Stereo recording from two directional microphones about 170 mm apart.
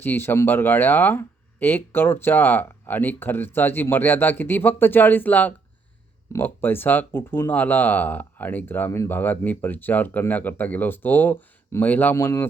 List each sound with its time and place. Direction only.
0.0 s speech: 10° left (ahead or behind)